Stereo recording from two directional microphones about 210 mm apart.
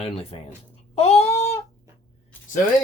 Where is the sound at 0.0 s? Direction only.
30° left (ahead or behind).